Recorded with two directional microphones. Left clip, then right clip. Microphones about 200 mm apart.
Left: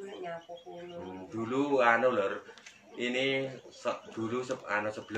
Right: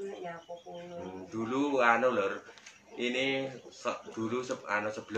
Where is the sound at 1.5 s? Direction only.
15° right (ahead or behind).